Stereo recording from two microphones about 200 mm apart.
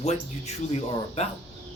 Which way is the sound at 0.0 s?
35° left (ahead or behind).